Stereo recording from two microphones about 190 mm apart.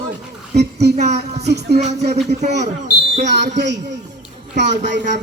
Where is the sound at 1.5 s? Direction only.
60° right (ahead or behind).